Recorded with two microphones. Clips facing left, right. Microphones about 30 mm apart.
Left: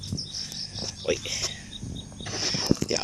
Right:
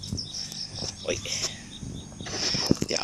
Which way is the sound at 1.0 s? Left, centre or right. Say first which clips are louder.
Left 3 dB; centre.